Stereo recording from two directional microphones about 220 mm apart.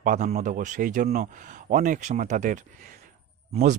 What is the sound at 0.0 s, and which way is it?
Speech, 40° right (ahead or behind).